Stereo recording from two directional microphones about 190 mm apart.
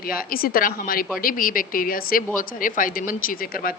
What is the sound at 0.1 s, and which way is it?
Speech, 50° left (ahead or behind).